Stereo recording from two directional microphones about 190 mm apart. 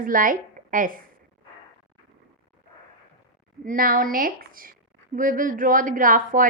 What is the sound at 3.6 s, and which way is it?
A woman's voice, 50° right (ahead or behind).